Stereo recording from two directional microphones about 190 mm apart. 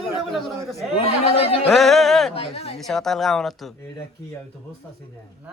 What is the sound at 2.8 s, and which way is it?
Speech, centre (ahead or behind).